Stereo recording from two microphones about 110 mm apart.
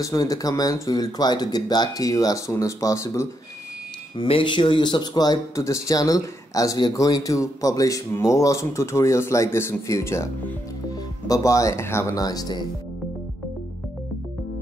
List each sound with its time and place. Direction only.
0.0 s speech: 30° left (ahead or behind)
4.2 s speech: 50° left (ahead or behind); by 10.2 s 25° left (ahead or behind)
11.2 s speech: 30° left (ahead or behind)